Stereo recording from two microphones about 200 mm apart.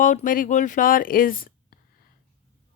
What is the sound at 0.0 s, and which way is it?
Speech, 40° left (ahead or behind).